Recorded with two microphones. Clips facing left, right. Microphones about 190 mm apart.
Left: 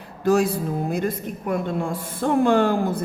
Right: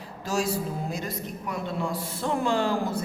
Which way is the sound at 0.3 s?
55° left (ahead or behind).